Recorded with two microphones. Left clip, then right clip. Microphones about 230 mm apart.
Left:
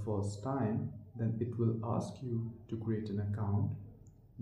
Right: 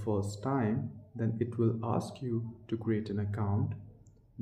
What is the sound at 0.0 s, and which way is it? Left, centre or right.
Speech, right.